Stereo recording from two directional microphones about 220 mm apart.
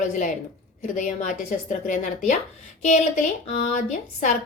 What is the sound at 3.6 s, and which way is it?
Speech, 35° left (ahead or behind).